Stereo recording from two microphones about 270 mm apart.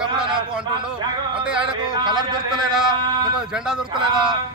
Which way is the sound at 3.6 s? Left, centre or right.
Centre.